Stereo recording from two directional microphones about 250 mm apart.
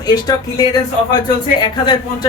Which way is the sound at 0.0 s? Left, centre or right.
Centre.